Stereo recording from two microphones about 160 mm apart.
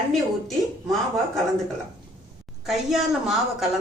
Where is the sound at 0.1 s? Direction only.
Centre (ahead or behind).